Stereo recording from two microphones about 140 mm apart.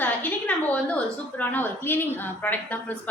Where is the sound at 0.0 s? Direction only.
15° left (ahead or behind).